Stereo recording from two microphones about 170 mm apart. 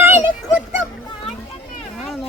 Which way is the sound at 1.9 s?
Centre (ahead or behind).